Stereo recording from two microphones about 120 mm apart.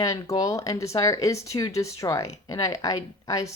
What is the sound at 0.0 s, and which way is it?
Speech, 30° left (ahead or behind).